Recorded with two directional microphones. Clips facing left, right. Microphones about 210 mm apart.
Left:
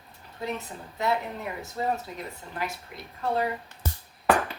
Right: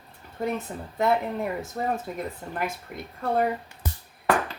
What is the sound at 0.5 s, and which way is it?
Speech, 50° right (ahead or behind).